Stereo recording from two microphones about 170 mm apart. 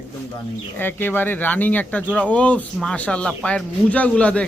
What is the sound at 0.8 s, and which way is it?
Speech, 10° left (ahead or behind).